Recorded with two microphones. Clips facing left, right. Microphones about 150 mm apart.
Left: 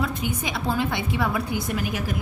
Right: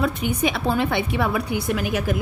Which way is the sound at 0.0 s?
65° right (ahead or behind).